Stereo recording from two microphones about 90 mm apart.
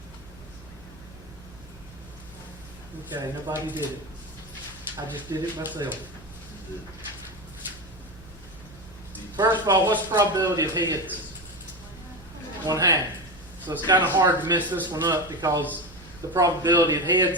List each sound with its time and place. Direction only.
3.5 s speech: 25° right (ahead or behind)
5.3 s speech: 55° right (ahead or behind)
9.3 s speech: 55° right (ahead or behind)
12.6 s speech: 45° right (ahead or behind)